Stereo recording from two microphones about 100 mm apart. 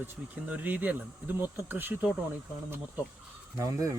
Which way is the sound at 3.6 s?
30° right (ahead or behind).